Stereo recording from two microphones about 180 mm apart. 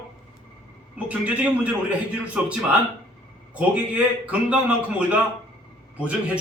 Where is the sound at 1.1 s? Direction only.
10° right (ahead or behind).